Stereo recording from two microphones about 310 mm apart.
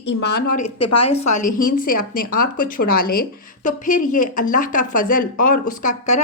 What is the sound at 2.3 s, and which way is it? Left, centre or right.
A woman's voice, left.